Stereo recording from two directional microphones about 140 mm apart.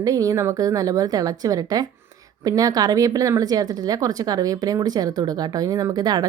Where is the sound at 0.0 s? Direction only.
25° right (ahead or behind).